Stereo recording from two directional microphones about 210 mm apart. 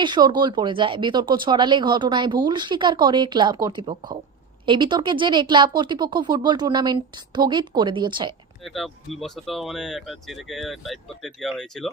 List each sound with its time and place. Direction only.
0.0 s speech: 20° right (ahead or behind)
8.6 s speech: centre (ahead or behind)